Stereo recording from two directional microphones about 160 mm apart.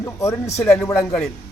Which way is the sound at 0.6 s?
5° left (ahead or behind).